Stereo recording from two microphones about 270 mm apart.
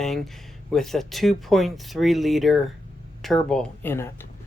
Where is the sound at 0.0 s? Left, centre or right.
Centre.